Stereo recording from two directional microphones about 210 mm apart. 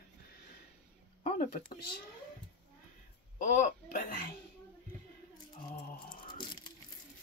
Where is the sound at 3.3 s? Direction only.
40° left (ahead or behind).